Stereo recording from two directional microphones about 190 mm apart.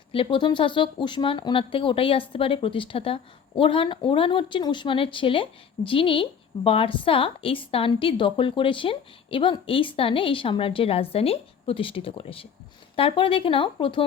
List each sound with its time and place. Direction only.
0.1 s speech: 25° left (ahead or behind)